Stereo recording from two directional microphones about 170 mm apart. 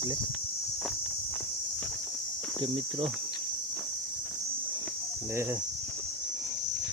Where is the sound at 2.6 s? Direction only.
30° right (ahead or behind).